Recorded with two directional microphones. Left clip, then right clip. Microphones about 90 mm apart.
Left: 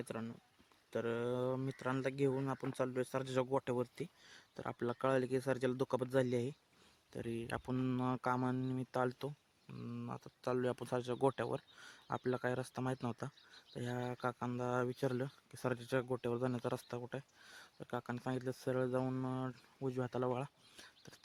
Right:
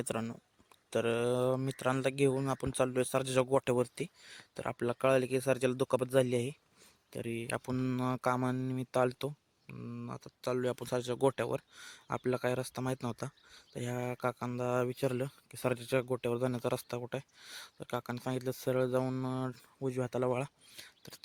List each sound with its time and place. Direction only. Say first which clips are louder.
0.0 s speech: right 8 dB; 80° right
0.9 s speech: right 7 dB; 55° right (ahead or behind)
4.2 s speech: right 7 dB; 30° right (ahead or behind)
9.7 s speech: right 2 dB; 10° right (ahead or behind); by 19.0 s 40° right (ahead or behind)
19.0 s speech: right 4 dB; 30° right (ahead or behind)